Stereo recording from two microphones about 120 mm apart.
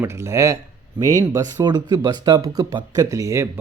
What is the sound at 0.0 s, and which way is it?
Speech, 20° right (ahead or behind).